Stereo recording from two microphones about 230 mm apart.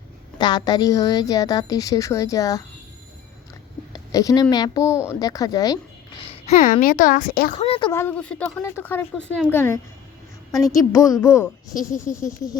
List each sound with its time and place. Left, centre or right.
0.3 s a woman's voice: centre
4.1 s a woman's voice: centre